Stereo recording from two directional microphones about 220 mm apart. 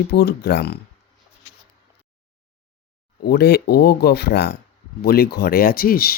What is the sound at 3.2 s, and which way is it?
Speech, 45° left (ahead or behind).